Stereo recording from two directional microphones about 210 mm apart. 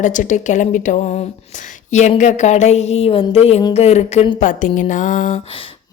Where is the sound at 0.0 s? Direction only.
35° left (ahead or behind).